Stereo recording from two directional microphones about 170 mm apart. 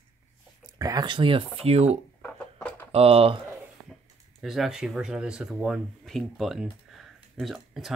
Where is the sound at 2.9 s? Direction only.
35° right (ahead or behind).